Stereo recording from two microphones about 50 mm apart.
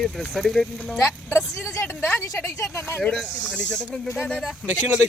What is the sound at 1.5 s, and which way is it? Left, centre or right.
Speech, left.